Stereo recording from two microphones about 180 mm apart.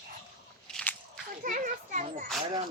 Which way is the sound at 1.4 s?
50° right (ahead or behind).